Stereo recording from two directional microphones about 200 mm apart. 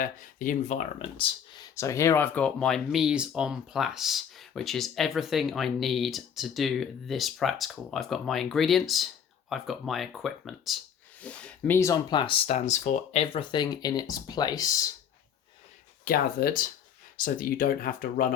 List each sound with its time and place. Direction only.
0.0 s speech: 40° left (ahead or behind)
1.7 s speech: 15° left (ahead or behind)
16.0 s speech: 50° left (ahead or behind)